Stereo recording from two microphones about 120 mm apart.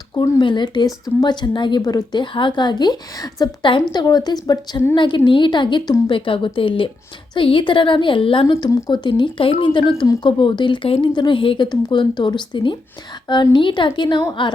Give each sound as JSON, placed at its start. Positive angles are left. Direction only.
{"t": 0.1, "sound": "speech", "side_deg": 35}
{"t": 2.2, "sound": "speech", "side_deg": 45}